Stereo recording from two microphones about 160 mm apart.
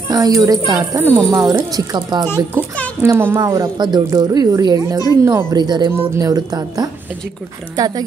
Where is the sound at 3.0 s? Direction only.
15° right (ahead or behind).